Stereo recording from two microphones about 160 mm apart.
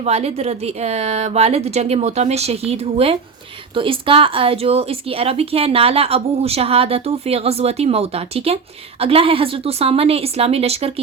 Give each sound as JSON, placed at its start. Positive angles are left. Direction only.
{"t": 0.0, "sound": "speech", "side_deg": -40}